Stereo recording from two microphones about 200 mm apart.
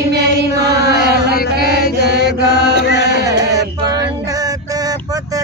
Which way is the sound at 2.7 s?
60° right (ahead or behind).